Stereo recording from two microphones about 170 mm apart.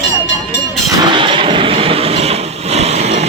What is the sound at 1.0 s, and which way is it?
Vehicle, 30° right (ahead or behind).